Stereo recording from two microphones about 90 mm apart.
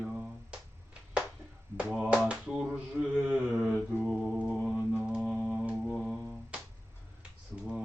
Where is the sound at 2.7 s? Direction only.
15° right (ahead or behind).